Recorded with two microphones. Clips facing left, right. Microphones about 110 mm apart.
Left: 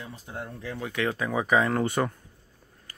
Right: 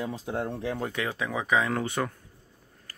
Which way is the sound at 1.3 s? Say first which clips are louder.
Left 2 dB; 10° left (ahead or behind).